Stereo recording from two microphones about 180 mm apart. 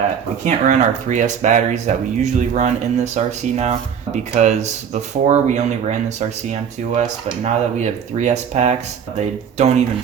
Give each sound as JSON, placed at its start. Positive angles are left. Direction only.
{"t": 0.4, "sound": "speech", "side_deg": -40}